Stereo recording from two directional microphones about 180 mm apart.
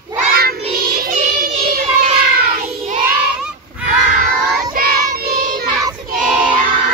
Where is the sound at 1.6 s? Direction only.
40° right (ahead or behind).